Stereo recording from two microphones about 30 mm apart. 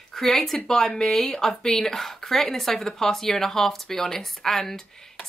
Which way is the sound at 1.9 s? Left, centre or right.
Centre.